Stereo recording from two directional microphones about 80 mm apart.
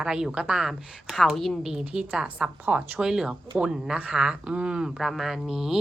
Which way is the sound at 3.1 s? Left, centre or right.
Centre.